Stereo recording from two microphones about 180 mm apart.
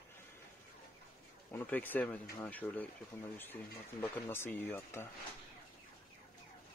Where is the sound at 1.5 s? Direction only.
10° left (ahead or behind).